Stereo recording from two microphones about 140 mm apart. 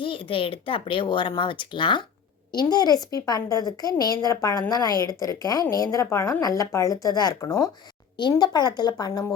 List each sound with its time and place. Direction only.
0.0 s speech: 40° left (ahead or behind)